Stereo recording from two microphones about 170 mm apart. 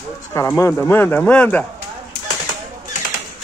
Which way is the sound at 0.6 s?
15° left (ahead or behind).